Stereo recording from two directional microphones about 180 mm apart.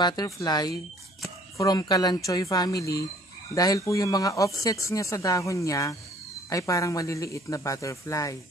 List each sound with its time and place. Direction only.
0.0 s speech: 20° left (ahead or behind)